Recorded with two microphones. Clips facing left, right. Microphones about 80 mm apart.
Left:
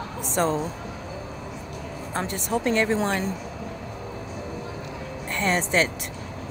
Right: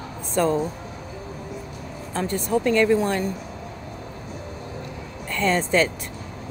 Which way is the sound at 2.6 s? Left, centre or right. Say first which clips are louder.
Right 4 dB; left.